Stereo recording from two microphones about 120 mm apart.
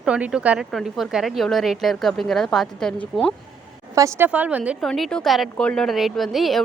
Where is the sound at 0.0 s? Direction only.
5° right (ahead or behind).